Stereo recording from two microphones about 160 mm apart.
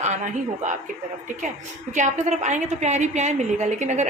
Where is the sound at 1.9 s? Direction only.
50° right (ahead or behind).